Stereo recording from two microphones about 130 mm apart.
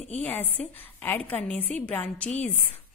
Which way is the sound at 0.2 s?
15° left (ahead or behind).